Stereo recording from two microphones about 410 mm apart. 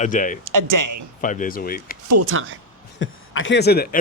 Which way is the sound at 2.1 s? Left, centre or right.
Right.